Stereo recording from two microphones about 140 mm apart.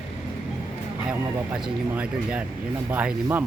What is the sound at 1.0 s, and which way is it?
Speech, 10° right (ahead or behind).